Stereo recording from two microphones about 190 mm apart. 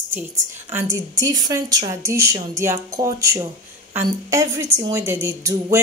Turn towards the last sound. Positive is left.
turn(degrees=-15)  # may be behind; listen again after turning